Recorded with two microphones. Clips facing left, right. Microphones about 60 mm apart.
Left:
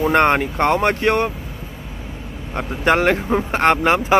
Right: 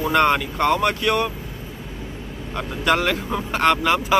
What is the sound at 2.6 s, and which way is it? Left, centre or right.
Speech, left.